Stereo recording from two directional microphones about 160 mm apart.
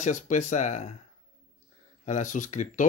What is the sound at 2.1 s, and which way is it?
Speech, 50° left (ahead or behind).